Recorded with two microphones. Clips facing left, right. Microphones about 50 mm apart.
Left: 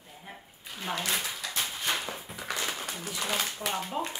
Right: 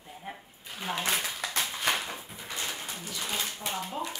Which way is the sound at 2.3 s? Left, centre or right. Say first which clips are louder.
Left 4 dB; left.